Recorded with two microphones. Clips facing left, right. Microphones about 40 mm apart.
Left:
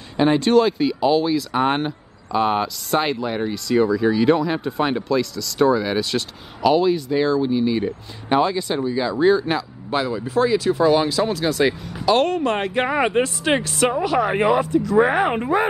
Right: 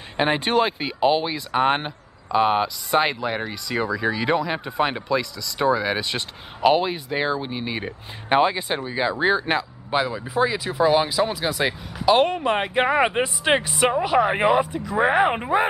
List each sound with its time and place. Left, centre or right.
0.2 s speech: right
1.5 s speech: centre
9.8 s speech: centre